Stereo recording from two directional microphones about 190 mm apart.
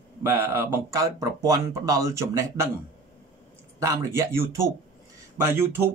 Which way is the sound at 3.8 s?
15° right (ahead or behind).